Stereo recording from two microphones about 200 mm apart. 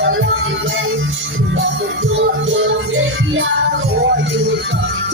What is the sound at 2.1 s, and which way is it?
Music, 70° right (ahead or behind).